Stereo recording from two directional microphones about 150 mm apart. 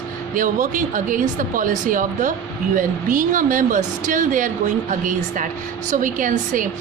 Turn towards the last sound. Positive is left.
turn(degrees=-60)  # may be behind; listen again after turning